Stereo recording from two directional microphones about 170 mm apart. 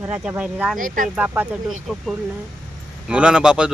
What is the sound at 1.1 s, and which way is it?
Speech, 10° right (ahead or behind).